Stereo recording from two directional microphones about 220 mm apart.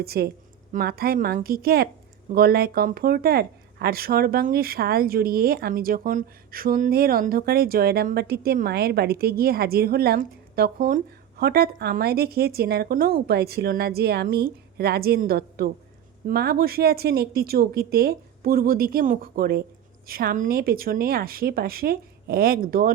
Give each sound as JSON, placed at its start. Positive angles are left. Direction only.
{"t": 0.0, "sound": "speech", "side_deg": -45}